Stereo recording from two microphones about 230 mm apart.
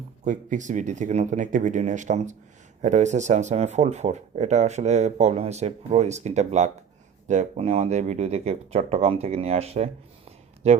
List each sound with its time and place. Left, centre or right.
0.3 s speech: right